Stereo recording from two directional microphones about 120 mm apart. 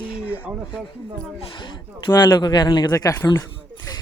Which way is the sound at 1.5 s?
45° left (ahead or behind).